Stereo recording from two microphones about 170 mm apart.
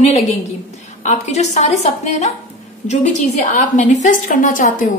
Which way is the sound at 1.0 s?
40° left (ahead or behind).